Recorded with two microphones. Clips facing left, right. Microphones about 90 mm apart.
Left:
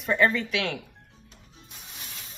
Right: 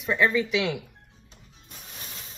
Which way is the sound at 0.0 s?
Centre (ahead or behind).